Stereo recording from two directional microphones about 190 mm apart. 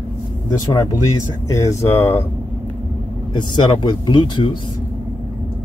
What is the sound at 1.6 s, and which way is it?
Speech, 15° left (ahead or behind).